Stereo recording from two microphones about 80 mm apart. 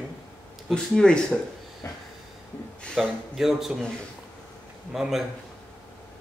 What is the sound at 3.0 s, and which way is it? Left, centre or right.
Speech, centre.